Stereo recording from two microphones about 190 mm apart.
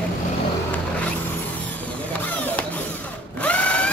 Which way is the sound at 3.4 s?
5° left (ahead or behind).